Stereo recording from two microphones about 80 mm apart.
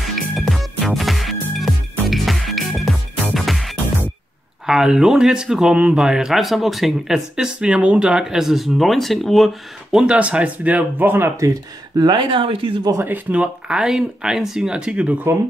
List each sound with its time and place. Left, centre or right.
0.0 s music: centre
4.6 s speech: centre
9.9 s speech: centre; by 11.4 s right
11.9 s speech: right
13.0 s speech: right
13.4 s speech: centre